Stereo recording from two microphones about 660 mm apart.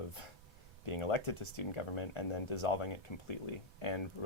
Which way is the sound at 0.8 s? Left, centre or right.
Left.